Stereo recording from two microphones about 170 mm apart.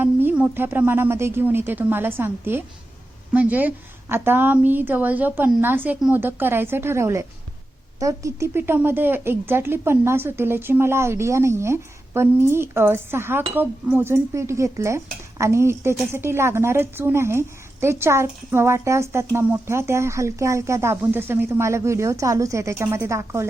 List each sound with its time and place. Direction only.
0.0 s a woman's voice: 10° right (ahead or behind)